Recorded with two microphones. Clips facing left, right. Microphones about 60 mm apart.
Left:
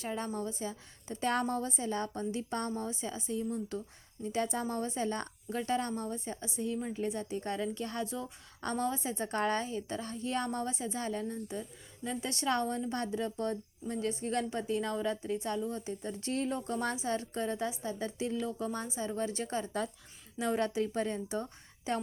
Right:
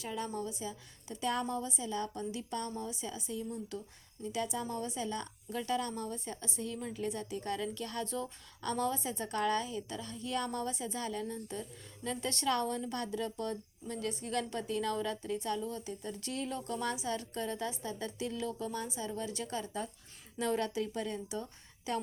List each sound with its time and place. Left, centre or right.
0.0 s a woman's voice: left
20.4 s speech: left